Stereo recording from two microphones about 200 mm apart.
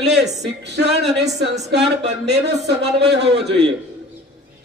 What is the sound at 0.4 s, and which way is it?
Speech, 55° right (ahead or behind).